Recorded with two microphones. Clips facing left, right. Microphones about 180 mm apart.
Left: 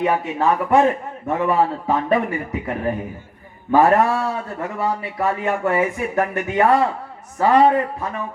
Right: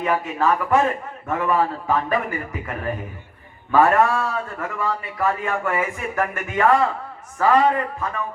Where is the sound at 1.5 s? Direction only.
25° left (ahead or behind).